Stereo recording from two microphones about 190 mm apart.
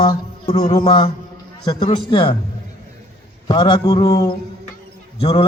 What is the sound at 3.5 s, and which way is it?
Speech, 25° left (ahead or behind).